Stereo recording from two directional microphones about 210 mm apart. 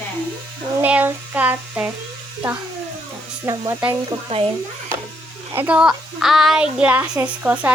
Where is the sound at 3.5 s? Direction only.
15° right (ahead or behind).